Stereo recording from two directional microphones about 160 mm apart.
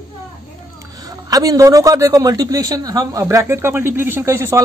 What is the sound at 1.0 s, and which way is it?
A man's voice, 20° right (ahead or behind).